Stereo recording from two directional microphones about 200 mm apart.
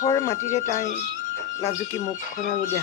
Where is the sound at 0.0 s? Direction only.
15° left (ahead or behind).